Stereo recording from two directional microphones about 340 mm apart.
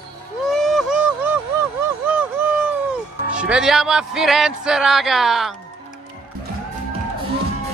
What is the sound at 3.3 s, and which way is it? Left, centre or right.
Speech, centre.